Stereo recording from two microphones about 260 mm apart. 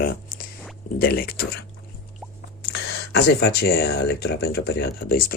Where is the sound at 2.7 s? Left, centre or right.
Left.